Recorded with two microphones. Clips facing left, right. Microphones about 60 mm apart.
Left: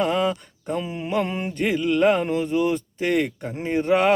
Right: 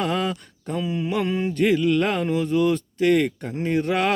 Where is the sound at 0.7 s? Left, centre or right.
Left.